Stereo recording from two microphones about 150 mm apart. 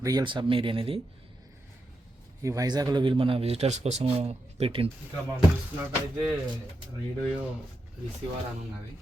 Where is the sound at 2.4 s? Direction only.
20° right (ahead or behind); by 4.9 s 40° right (ahead or behind).